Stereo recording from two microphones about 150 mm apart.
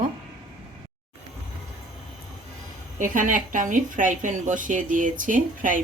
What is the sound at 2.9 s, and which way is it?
A woman's voice, 60° right (ahead or behind).